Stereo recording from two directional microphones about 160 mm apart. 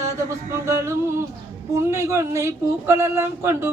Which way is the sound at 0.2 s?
20° right (ahead or behind).